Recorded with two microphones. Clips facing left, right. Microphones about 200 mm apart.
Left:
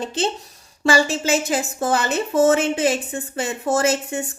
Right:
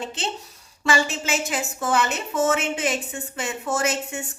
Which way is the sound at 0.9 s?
35° left (ahead or behind).